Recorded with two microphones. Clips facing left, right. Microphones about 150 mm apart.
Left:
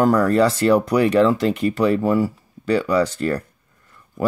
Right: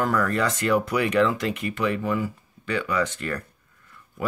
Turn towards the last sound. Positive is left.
turn(degrees=35)  # may be behind; listen again after turning